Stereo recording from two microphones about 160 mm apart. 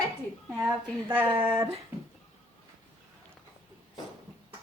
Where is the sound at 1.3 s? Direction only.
35° right (ahead or behind).